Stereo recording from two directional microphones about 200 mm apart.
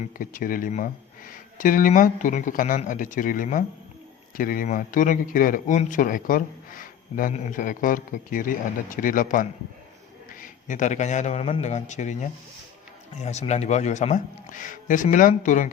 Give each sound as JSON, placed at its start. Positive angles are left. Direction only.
{"t": 0.0, "sound": "a man's voice", "side_deg": 45}